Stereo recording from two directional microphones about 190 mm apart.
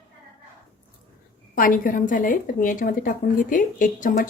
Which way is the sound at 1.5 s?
45° left (ahead or behind).